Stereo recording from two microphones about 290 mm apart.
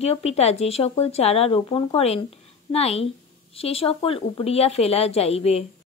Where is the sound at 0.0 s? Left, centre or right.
Left.